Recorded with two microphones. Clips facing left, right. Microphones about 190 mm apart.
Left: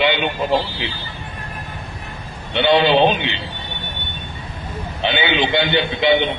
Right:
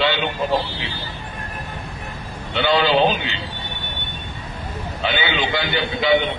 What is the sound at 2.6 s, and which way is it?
Speech, 25° left (ahead or behind).